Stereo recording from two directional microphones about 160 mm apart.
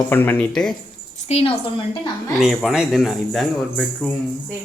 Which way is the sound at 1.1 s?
40° left (ahead or behind).